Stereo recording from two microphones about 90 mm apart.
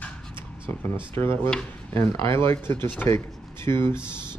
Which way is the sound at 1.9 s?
30° left (ahead or behind).